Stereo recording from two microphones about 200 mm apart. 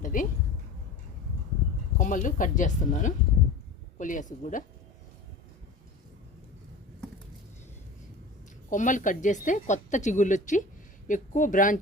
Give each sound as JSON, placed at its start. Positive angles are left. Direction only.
{"t": 0.0, "sound": "a sound", "side_deg": 40}
{"t": 2.0, "sound": "speech", "side_deg": 40}
{"t": 8.7, "sound": "speech", "side_deg": 40}